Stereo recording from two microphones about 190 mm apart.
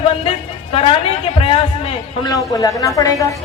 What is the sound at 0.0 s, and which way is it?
A woman's voice, 30° left (ahead or behind).